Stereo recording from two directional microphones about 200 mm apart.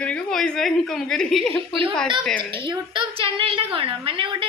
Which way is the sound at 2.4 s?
25° right (ahead or behind).